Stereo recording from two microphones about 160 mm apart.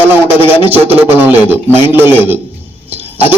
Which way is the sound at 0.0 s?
10° right (ahead or behind).